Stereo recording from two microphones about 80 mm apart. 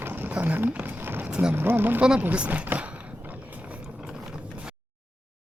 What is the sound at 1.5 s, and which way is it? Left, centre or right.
Speech, right.